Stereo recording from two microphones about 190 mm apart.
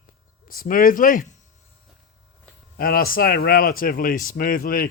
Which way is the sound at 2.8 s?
50° left (ahead or behind).